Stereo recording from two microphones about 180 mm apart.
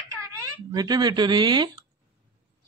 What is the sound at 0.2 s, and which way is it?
Speech, 20° right (ahead or behind).